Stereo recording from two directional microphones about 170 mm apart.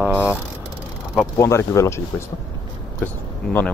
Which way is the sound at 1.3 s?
15° left (ahead or behind).